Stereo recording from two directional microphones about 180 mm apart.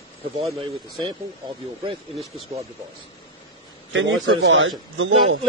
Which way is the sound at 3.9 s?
80° right.